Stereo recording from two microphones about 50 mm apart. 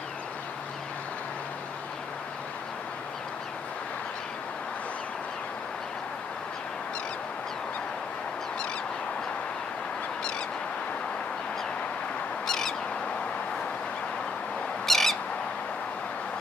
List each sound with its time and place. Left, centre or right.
12.4 s bird: centre
14.9 s owl: centre